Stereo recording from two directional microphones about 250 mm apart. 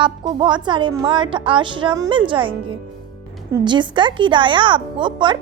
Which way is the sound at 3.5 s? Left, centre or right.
Centre.